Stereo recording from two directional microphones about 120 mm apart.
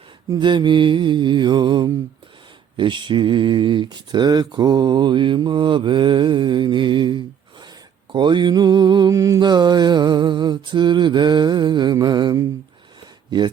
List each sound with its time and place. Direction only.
0.3 s speech: 40° right (ahead or behind)